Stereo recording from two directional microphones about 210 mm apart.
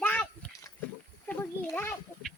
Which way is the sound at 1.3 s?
10° left (ahead or behind).